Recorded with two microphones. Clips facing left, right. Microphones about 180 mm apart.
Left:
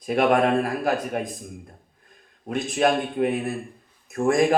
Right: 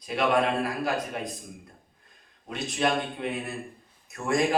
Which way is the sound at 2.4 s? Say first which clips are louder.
Left 6 dB; 50° left (ahead or behind).